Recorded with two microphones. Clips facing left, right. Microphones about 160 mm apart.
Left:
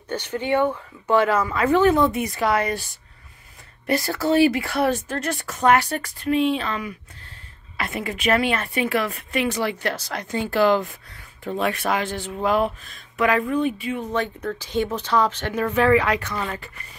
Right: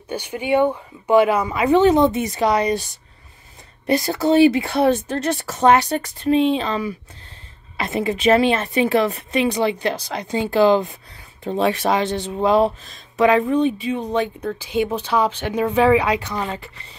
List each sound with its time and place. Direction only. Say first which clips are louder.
0.1 s speech: right 3 dB; 10° right (ahead or behind)